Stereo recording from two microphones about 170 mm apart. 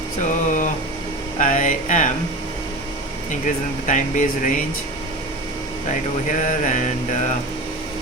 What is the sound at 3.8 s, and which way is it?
Speech, 50° left (ahead or behind).